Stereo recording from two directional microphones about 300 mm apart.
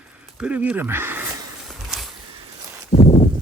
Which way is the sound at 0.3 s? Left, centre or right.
Centre.